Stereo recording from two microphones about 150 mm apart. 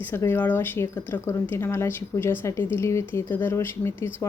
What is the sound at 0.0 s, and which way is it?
Speech, 15° left (ahead or behind).